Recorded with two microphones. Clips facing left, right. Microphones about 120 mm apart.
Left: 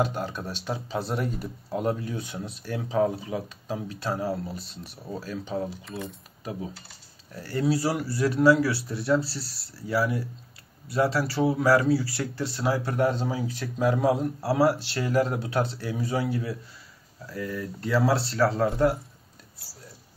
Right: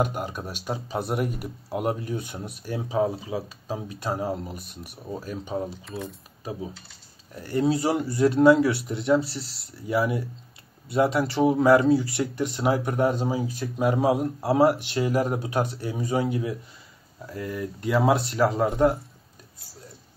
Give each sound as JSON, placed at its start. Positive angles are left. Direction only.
{"t": 0.0, "sound": "speech", "side_deg": -15}
{"t": 5.9, "sound": "speech", "side_deg": 0}
{"t": 7.3, "sound": "speech", "side_deg": -20}